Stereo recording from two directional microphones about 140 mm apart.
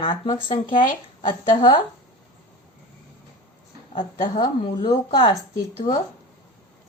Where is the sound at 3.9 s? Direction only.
30° left (ahead or behind).